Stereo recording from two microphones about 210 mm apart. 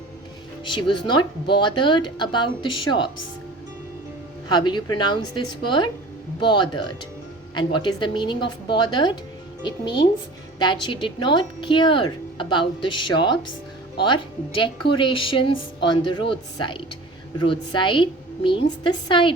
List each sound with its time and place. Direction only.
0.6 s speech: 25° left (ahead or behind)
4.4 s speech: 20° left (ahead or behind)